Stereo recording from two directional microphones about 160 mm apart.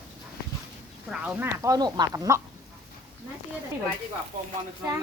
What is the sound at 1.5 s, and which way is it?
Speech, 20° right (ahead or behind).